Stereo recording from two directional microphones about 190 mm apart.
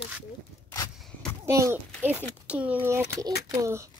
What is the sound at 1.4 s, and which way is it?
Speech, 15° right (ahead or behind).